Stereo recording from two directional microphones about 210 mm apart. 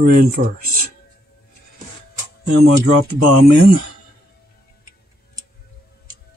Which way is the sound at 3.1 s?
50° right (ahead or behind).